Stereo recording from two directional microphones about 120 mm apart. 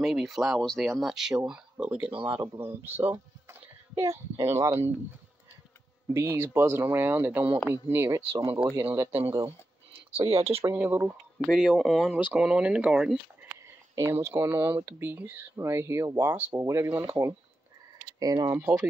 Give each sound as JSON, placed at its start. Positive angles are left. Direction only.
{"t": 0.0, "sound": "speech", "side_deg": 0}
{"t": 6.1, "sound": "speech", "side_deg": -20}
{"t": 10.1, "sound": "speech", "side_deg": -50}
{"t": 10.8, "sound": "speech", "side_deg": -15}
{"t": 11.3, "sound": "speech", "side_deg": 0}
{"t": 13.9, "sound": "speech", "side_deg": -20}